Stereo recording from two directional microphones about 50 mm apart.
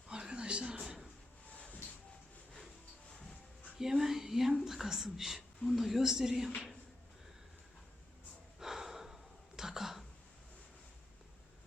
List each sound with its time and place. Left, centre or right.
0.1 s a sound: centre
3.8 s a woman's voice: centre
8.5 s gasp: centre